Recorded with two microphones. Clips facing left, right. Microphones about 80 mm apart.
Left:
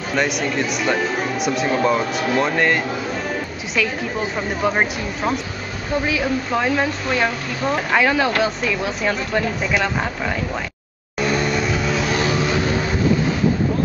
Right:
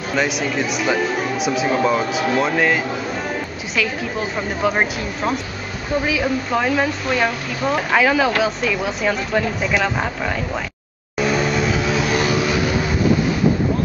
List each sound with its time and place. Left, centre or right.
0.1 s speech: centre
11.1 s vehicle: centre